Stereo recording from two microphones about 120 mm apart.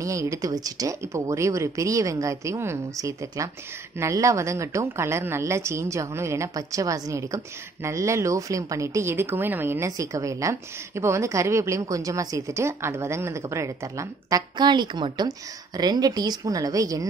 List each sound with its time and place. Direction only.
0.0 s a woman's voice: 25° right (ahead or behind)
14.6 s a woman's voice: 40° right (ahead or behind)